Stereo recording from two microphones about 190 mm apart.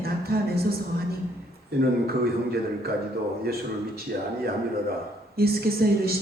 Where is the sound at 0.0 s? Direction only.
55° right (ahead or behind).